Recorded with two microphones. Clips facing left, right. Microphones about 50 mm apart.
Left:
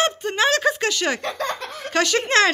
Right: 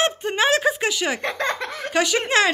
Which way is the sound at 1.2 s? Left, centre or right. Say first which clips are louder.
Right 2 dB; right.